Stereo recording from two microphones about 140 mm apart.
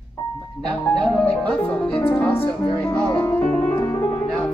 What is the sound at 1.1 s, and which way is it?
Music, 10° left (ahead or behind).